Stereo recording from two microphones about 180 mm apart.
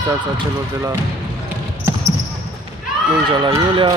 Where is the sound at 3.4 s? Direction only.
25° right (ahead or behind).